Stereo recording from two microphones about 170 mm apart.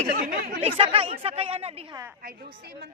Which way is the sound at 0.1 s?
60° right (ahead or behind).